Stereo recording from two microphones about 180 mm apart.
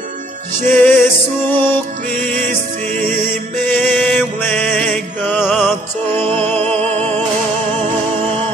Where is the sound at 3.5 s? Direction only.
10° left (ahead or behind).